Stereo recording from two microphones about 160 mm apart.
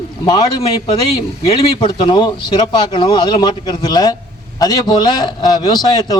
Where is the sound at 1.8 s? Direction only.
30° left (ahead or behind).